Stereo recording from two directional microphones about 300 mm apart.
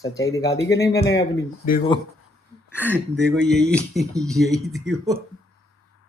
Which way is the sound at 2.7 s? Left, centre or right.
Centre.